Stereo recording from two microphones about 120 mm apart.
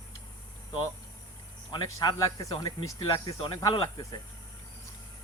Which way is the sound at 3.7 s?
45° left (ahead or behind).